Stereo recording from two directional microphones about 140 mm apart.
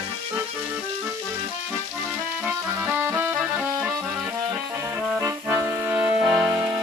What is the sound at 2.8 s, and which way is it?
Music, 15° right (ahead or behind).